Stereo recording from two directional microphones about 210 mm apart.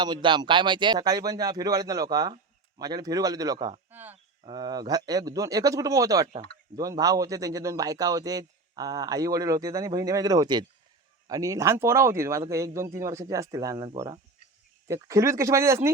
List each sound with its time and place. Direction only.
0.0 s speech: 20° right (ahead or behind)
3.9 s a sound: 10° right (ahead or behind)
4.4 s a man's voice: 20° right (ahead or behind)